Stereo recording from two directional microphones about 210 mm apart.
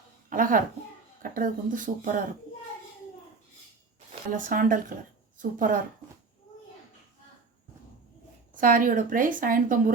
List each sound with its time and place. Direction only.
0.3 s a child's voice: 40° right (ahead or behind)
4.1 s speech: 40° right (ahead or behind)
8.5 s speech: 40° right (ahead or behind)